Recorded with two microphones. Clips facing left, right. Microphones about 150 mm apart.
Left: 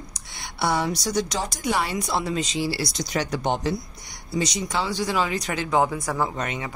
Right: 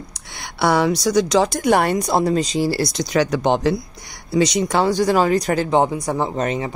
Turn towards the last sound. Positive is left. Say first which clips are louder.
# right 6 dB
turn(degrees=-30)  # may be behind; listen again after turning